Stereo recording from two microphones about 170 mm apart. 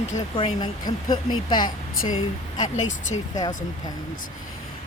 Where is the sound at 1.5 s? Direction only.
50° left (ahead or behind).